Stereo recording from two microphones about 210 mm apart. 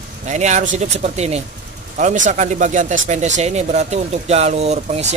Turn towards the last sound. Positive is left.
turn(degrees=-30)  # may be behind; listen again after turning